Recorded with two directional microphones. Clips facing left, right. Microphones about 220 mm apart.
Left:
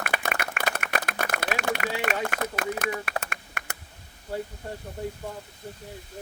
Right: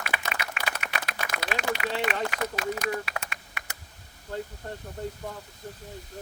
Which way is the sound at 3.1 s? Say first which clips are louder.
Left 4 dB; 45° left (ahead or behind).